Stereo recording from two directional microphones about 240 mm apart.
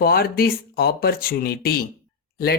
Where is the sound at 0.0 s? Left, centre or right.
Left.